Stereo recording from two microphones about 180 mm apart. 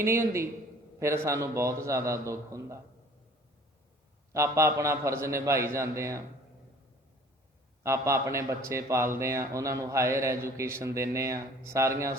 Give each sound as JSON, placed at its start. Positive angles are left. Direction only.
{"t": 0.0, "sound": "a man's voice", "side_deg": -15}
{"t": 4.3, "sound": "a man's voice", "side_deg": -15}
{"t": 7.9, "sound": "a man's voice", "side_deg": -15}